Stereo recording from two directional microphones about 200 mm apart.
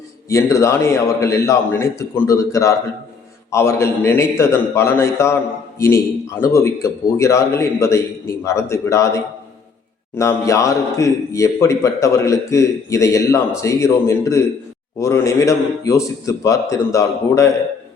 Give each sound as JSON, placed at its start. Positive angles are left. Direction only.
{"t": 0.3, "sound": "a man's voice", "side_deg": 15}